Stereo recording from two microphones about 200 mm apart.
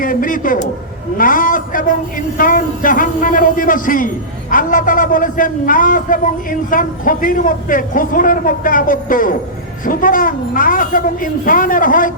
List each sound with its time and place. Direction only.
0.0 s a man's voice: 45° left (ahead or behind)